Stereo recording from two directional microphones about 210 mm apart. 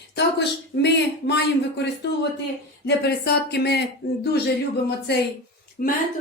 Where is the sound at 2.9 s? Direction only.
50° left (ahead or behind).